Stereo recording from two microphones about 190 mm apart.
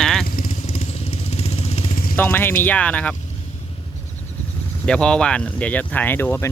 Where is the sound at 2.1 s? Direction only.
10° left (ahead or behind).